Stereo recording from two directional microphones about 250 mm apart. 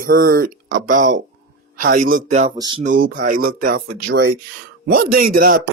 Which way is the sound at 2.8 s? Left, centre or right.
Right.